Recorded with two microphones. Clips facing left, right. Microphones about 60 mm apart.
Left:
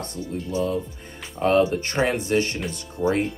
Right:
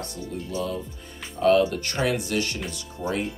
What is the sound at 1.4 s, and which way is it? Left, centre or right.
Speech, left.